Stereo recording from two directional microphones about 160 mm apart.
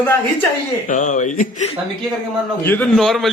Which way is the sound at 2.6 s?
10° left (ahead or behind).